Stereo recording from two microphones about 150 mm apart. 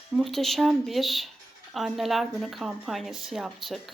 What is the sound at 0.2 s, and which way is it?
Speech, centre (ahead or behind).